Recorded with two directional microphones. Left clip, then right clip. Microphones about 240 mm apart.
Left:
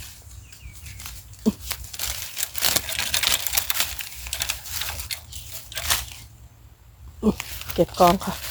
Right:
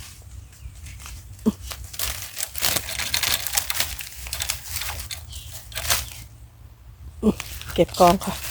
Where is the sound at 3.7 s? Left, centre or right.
Centre.